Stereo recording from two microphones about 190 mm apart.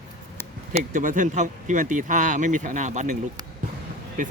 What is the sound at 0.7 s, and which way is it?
Speech, 45° right (ahead or behind).